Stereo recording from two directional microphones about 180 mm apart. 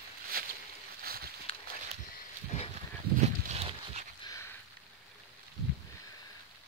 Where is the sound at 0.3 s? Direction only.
55° right (ahead or behind).